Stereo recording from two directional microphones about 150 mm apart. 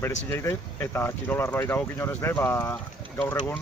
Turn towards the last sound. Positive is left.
turn(degrees=15)  # may be behind; listen again after turning